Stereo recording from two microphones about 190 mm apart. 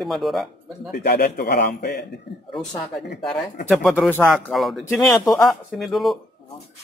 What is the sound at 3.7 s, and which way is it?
Speech, centre (ahead or behind).